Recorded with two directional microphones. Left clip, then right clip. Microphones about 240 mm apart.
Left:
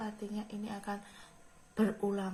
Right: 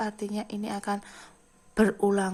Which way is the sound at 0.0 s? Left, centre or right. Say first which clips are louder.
Right 10 dB; right.